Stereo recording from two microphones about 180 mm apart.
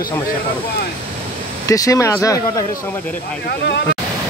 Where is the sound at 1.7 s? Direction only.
20° left (ahead or behind).